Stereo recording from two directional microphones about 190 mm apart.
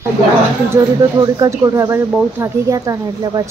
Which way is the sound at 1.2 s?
20° right (ahead or behind).